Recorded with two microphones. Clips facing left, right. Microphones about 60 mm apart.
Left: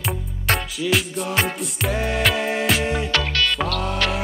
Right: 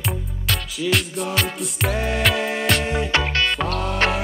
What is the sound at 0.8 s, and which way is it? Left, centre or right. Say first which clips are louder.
Music: right 2 dB; centre.